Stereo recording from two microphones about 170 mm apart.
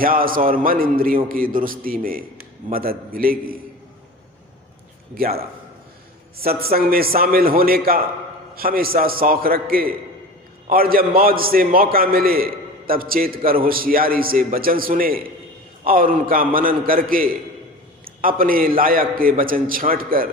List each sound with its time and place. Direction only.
0.0 s a man's voice: 55° right (ahead or behind)
5.1 s a man's voice: 60° right (ahead or behind)
6.4 s a man's voice: 65° right (ahead or behind)